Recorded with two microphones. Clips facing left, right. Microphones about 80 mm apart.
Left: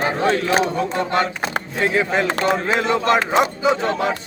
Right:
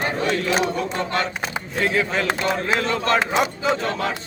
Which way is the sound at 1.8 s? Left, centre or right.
Left.